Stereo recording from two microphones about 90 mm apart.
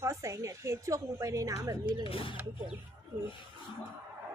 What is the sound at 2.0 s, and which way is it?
Speech, 80° left.